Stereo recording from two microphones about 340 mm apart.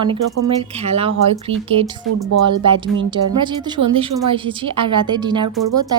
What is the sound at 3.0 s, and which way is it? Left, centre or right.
Speech, centre.